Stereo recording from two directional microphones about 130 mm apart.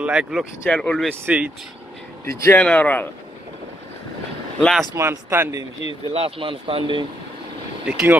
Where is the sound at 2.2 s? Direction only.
20° left (ahead or behind).